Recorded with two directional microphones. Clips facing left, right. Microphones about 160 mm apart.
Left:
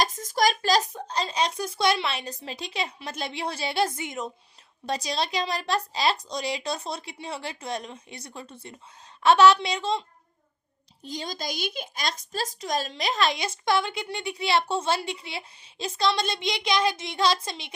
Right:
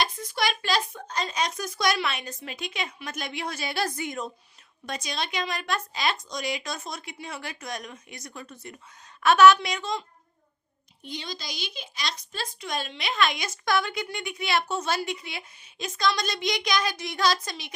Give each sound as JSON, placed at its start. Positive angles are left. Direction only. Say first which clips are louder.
{"t": 0.0, "sound": "a child's voice", "louder": "left 4 dB", "side_deg": 40}
{"t": 11.0, "sound": "a woman's voice", "louder": "left 4 dB", "side_deg": 40}